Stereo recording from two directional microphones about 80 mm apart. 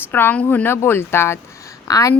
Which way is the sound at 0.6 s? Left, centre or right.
Left.